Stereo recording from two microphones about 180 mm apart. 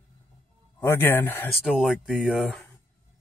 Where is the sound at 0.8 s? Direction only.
10° left (ahead or behind).